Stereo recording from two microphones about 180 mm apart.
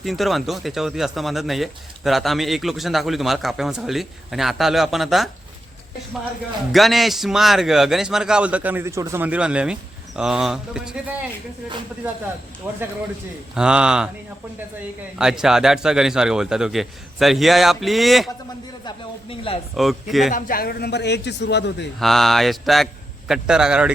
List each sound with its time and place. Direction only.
0.0 s speech: centre (ahead or behind)
6.7 s speech: centre (ahead or behind)
12.6 s speech: 15° right (ahead or behind)
15.2 s speech: 5° right (ahead or behind)
18.9 s a man's voice: 30° left (ahead or behind)
19.7 s speech: centre (ahead or behind)
20.3 s a man's voice: 55° left (ahead or behind); by 21.8 s 70° left (ahead or behind)
22.0 s speech: centre (ahead or behind)